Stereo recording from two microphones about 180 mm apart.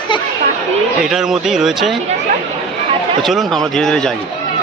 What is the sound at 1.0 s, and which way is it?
Speech, centre (ahead or behind).